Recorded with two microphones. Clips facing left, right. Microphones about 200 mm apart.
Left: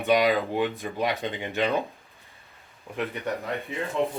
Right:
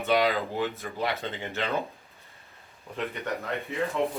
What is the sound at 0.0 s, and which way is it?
Speech, 15° left (ahead or behind).